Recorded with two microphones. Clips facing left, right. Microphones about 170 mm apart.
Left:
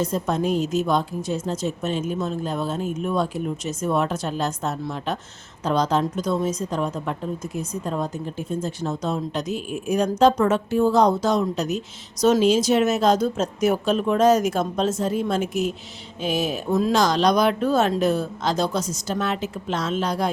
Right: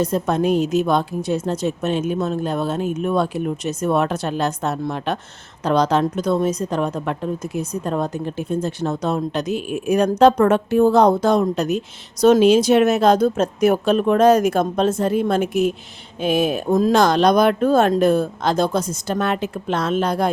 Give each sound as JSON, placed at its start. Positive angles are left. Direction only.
{"t": 0.0, "sound": "a woman's voice", "side_deg": -65}